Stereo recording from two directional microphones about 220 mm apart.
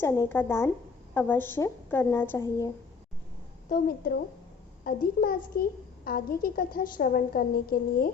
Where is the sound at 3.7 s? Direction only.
40° left (ahead or behind).